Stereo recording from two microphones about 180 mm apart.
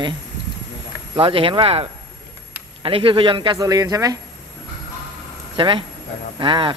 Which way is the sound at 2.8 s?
30° right (ahead or behind).